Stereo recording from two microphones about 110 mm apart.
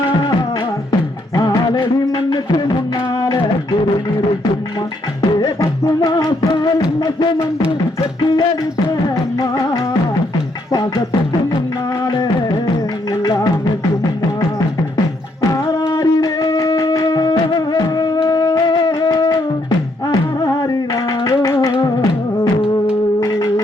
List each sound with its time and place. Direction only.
1.4 s music of bollywood: 35° left (ahead or behind)
3.2 s a sound: 40° left (ahead or behind)
5.4 s music: 35° left (ahead or behind)
13.2 s music: 35° left (ahead or behind)
15.9 s music: 35° left (ahead or behind)
18.2 s wind instrument: 40° left (ahead or behind)
21.2 s music: 35° left (ahead or behind)